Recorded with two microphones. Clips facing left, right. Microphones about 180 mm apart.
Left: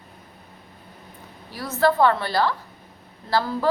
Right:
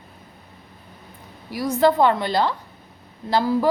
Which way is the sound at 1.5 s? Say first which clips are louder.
Right 3 dB; 15° right (ahead or behind).